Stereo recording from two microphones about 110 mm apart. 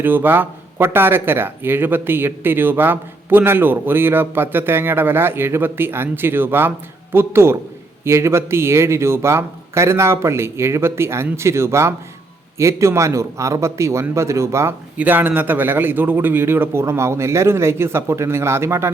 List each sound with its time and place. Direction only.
0.0 s speech: 20° right (ahead or behind)